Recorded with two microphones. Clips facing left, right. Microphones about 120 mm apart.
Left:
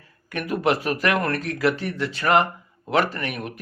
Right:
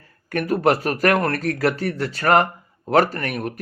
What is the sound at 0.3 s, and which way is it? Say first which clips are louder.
Speech: right 4 dB; 40° right (ahead or behind).